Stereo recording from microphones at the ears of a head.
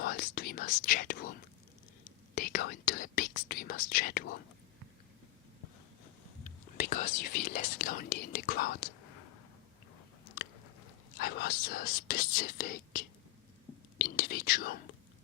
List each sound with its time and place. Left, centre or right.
0.0 s whispering: left
2.0 s speech: left
6.4 s speech: left
11.1 s speech: left